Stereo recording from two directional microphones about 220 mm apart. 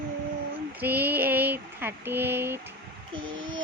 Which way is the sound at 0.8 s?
10° right (ahead or behind).